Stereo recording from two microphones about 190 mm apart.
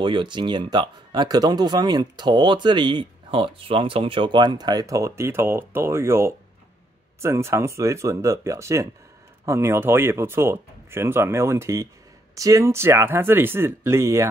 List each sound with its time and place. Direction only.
0.0 s speech: 25° right (ahead or behind)